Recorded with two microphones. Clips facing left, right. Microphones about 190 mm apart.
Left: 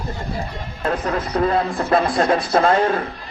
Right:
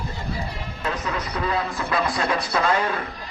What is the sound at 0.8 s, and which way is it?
A man's voice, 50° left (ahead or behind).